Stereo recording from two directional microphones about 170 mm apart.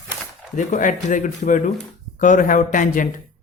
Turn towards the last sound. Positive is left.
turn(degrees=50)  # may be behind; listen again after turning